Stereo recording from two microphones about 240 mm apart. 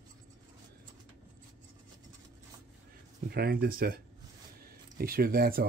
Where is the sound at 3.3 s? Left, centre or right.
Right.